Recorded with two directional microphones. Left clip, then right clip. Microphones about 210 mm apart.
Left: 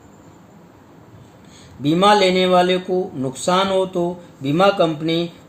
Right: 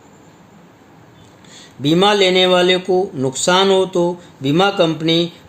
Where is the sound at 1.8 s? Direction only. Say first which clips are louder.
Right 1 dB; 45° right (ahead or behind).